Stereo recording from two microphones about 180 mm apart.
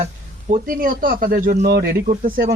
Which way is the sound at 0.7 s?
50° right (ahead or behind).